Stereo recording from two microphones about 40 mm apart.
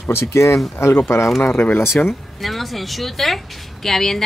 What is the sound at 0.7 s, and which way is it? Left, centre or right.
Speech, left.